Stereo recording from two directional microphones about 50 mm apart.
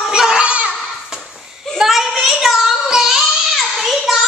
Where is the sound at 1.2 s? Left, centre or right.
Centre.